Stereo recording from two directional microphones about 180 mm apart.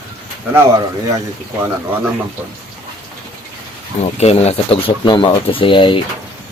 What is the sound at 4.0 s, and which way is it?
Speech, 35° left (ahead or behind).